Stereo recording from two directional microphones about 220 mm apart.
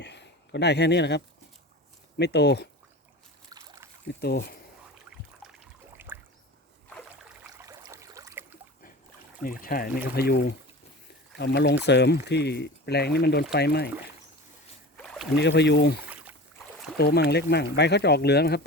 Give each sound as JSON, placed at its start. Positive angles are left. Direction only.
{"t": 0.0, "sound": "a sound", "side_deg": 50}
{"t": 2.1, "sound": "speech", "side_deg": 50}
{"t": 3.5, "sound": "boat", "side_deg": -15}
{"t": 4.2, "sound": "speech", "side_deg": 45}
{"t": 5.4, "sound": "trickle", "side_deg": -5}
{"t": 7.6, "sound": "a sound", "side_deg": -15}
{"t": 9.4, "sound": "speech", "side_deg": 40}
{"t": 15.0, "sound": "a sound", "side_deg": 5}
{"t": 15.4, "sound": "speech", "side_deg": 50}
{"t": 17.0, "sound": "speech", "side_deg": 45}